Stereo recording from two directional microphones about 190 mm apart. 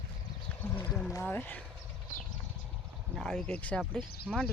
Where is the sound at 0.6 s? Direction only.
10° left (ahead or behind).